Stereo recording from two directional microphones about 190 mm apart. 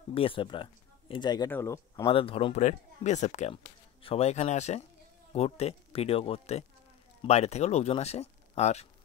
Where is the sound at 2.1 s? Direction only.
30° left (ahead or behind).